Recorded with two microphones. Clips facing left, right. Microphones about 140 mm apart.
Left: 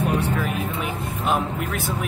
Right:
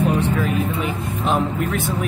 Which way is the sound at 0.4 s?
Centre (ahead or behind).